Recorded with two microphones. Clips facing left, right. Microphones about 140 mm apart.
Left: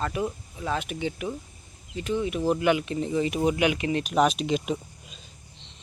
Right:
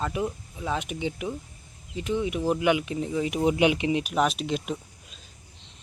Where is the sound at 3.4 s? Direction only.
25° right (ahead or behind).